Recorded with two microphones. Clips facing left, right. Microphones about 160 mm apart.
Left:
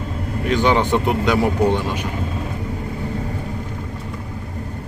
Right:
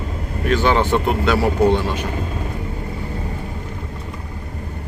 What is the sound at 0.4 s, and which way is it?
Speech, 15° left (ahead or behind).